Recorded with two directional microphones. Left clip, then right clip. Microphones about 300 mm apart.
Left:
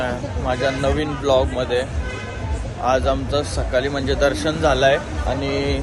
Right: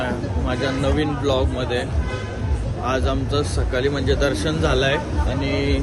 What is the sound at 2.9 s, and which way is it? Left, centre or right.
Speech, centre.